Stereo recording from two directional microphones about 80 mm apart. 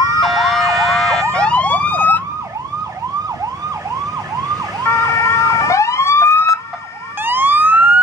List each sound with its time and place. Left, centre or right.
0.2 s emergency vehicle: centre; by 2.2 s left
4.8 s emergency vehicle: left
7.2 s police car: right